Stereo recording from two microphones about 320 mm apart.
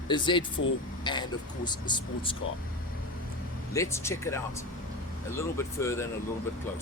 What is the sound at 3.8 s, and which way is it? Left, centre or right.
Speech, centre.